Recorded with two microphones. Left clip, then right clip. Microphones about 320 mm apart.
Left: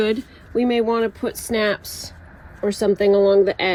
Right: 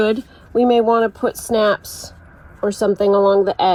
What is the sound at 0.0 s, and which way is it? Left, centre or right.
Speech, centre.